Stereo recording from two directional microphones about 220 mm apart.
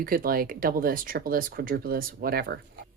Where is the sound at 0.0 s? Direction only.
40° right (ahead or behind).